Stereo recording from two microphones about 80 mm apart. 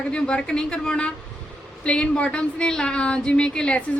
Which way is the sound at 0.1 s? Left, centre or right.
Centre.